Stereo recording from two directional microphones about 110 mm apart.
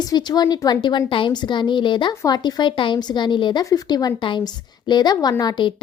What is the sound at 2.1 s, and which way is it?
Speech, 30° left (ahead or behind).